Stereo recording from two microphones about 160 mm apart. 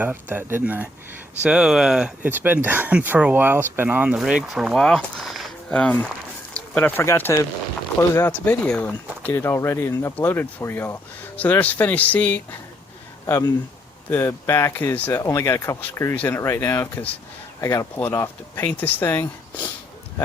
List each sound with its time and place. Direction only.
0.0 s speech: 10° right (ahead or behind); by 19.2 s 10° left (ahead or behind)